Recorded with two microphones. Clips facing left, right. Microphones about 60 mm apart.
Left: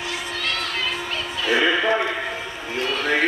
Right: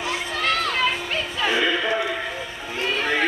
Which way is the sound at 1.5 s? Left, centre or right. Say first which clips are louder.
Left 4 dB; centre.